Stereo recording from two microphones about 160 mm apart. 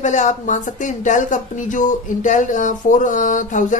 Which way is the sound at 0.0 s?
50° left (ahead or behind).